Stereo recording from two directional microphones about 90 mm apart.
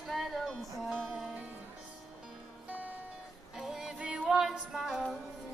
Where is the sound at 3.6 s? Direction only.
5° right (ahead or behind).